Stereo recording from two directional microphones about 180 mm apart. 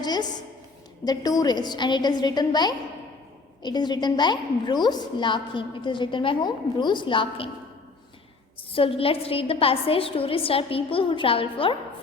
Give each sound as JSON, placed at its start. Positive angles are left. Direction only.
{"t": 0.0, "sound": "a sound", "side_deg": 20}
{"t": 1.0, "sound": "a woman's voice", "side_deg": 20}
{"t": 8.7, "sound": "a woman's voice", "side_deg": 30}